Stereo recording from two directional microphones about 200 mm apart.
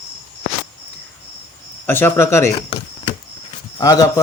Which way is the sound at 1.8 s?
10° left (ahead or behind).